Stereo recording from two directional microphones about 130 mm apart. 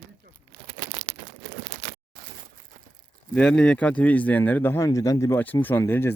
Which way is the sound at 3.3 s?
5° left (ahead or behind).